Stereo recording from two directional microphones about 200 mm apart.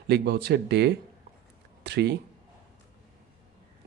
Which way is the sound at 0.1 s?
55° right (ahead or behind).